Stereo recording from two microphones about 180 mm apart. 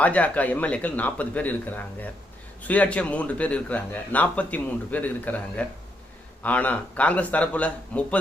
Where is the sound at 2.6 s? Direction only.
10° left (ahead or behind).